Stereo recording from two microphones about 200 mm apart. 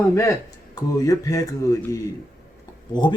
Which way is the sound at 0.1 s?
15° left (ahead or behind).